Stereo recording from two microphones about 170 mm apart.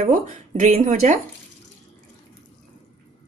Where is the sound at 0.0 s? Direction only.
45° right (ahead or behind).